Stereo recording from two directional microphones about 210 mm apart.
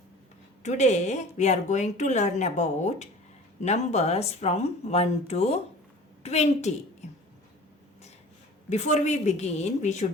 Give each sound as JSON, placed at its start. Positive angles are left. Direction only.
{"t": 0.6, "sound": "a woman's voice", "side_deg": 35}
{"t": 7.0, "sound": "whispering", "side_deg": 35}
{"t": 8.7, "sound": "a woman's voice", "side_deg": 35}